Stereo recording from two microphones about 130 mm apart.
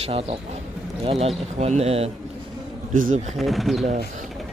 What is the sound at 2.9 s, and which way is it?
Speech, 90° right.